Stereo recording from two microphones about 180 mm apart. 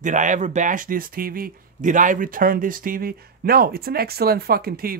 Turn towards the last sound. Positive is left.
turn(degrees=-55)  # may be behind; listen again after turning